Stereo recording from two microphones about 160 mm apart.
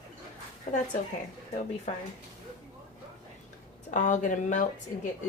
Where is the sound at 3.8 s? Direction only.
50° left (ahead or behind).